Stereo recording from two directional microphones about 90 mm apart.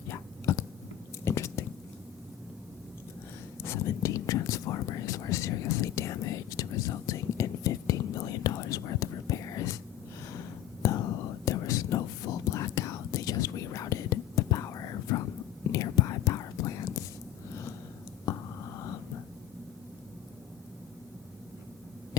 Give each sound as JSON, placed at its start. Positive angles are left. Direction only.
{"t": 0.1, "sound": "whispering", "side_deg": 35}
{"t": 1.2, "sound": "biting", "side_deg": 30}
{"t": 3.6, "sound": "whispering", "side_deg": 35}
{"t": 10.8, "sound": "whispering", "side_deg": 35}
{"t": 15.7, "sound": "whispering", "side_deg": 40}